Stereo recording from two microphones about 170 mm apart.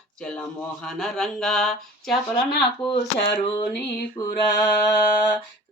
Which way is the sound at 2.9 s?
35° left (ahead or behind).